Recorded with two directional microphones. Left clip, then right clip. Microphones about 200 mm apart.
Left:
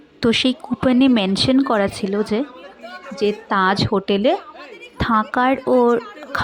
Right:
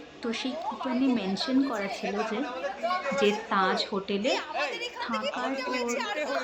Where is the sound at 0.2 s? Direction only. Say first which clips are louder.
Left 14 dB; 60° left (ahead or behind).